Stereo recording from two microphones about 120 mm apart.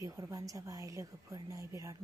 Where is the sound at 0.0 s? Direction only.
25° right (ahead or behind).